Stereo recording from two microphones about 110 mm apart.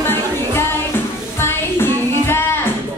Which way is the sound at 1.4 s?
20° left (ahead or behind).